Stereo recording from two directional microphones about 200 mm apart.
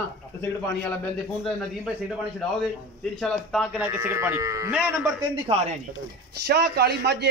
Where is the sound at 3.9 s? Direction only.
10° right (ahead or behind).